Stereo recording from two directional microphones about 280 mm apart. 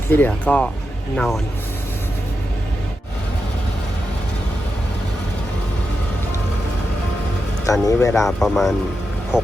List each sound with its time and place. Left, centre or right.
0.1 s speech: centre
7.7 s speech: centre